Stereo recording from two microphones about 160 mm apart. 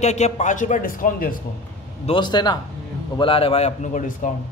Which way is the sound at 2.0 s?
30° left (ahead or behind).